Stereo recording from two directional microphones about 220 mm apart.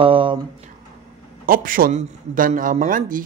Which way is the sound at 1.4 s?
40° right (ahead or behind).